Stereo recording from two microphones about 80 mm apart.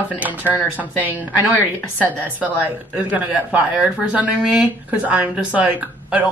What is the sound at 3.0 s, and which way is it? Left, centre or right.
Speech, centre.